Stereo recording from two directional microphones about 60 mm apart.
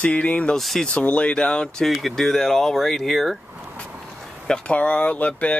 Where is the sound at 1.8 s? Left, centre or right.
Centre.